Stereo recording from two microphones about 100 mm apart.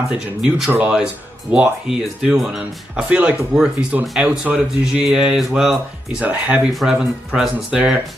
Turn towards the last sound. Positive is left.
turn(degrees=-10)  # may be behind; listen again after turning